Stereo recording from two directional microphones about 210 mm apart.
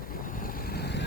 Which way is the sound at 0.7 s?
50° left (ahead or behind).